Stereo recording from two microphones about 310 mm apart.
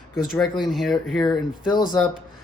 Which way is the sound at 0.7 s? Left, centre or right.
Centre.